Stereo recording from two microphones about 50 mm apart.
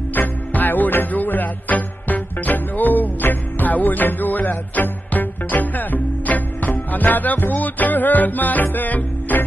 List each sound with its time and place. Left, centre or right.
0.1 s music: left